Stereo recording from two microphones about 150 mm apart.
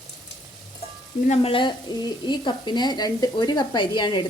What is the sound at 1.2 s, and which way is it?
Speech, 40° left (ahead or behind).